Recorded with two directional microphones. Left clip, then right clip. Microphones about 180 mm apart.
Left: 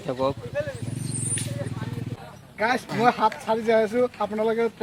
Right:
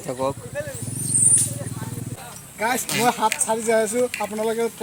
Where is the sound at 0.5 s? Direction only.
45° left (ahead or behind).